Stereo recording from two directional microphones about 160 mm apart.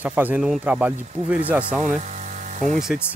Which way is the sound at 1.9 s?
50° right (ahead or behind).